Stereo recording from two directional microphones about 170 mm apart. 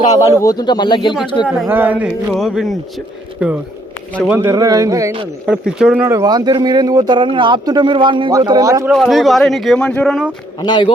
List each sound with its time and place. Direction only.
0.2 s a man's voice: 20° left (ahead or behind)
1.6 s a man's voice: 10° right (ahead or behind)
5.5 s speech: 5° right (ahead or behind)
6.1 s speech: 20° right (ahead or behind)
8.9 s speech: centre (ahead or behind)
10.6 s a man's voice: 25° left (ahead or behind)